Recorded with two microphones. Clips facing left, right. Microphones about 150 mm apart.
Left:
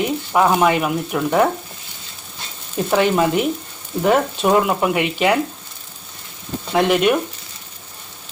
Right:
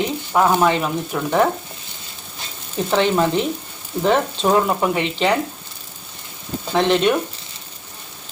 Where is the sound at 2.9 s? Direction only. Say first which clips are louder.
Left 1 dB; 10° left (ahead or behind).